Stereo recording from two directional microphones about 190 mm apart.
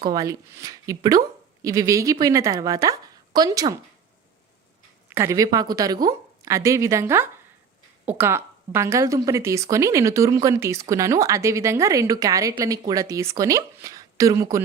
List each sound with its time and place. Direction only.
0.0 s a woman's voice: 20° right (ahead or behind)
5.0 s a woman's voice: 15° right (ahead or behind)